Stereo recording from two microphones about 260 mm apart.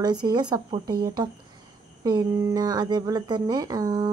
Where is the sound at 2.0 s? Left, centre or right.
Centre.